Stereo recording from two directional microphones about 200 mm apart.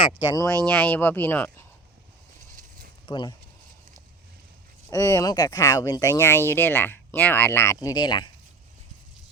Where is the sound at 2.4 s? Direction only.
45° right (ahead or behind).